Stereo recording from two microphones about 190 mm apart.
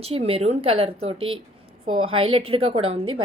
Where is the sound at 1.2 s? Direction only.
90° right.